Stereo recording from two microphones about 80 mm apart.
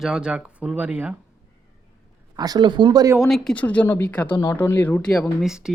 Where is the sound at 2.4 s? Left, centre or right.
Right.